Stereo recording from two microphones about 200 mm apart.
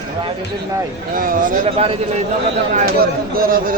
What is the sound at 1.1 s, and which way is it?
A man's voice, 45° right (ahead or behind).